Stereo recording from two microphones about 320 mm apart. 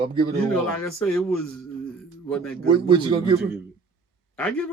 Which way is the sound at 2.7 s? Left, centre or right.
Centre.